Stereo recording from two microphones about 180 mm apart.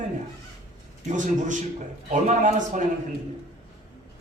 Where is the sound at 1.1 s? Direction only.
45° right (ahead or behind).